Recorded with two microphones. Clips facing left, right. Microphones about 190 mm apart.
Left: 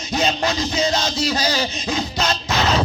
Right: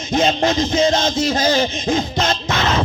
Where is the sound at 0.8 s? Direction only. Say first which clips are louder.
Right 4 dB; 50° right (ahead or behind).